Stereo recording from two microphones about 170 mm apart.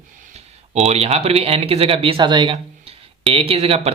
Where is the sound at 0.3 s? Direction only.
40° right (ahead or behind).